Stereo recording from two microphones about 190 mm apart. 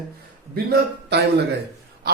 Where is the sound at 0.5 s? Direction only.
55° right (ahead or behind).